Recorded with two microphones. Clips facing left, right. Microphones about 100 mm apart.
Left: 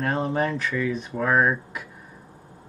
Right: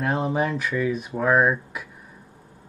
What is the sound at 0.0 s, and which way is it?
Speech, 5° right (ahead or behind).